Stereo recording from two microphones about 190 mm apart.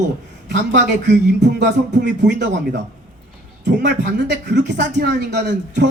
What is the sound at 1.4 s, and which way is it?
Child singing, 65° right (ahead or behind).